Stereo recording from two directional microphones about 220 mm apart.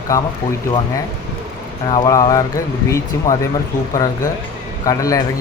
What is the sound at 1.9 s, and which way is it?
Speech, 20° left (ahead or behind).